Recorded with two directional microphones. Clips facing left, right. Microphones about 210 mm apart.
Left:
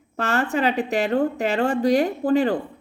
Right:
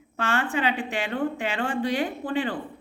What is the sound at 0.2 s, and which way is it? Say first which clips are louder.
A woman's voice: left 4 dB; 40° left (ahead or behind).